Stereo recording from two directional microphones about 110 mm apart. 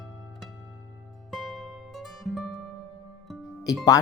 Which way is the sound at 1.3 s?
Centre (ahead or behind).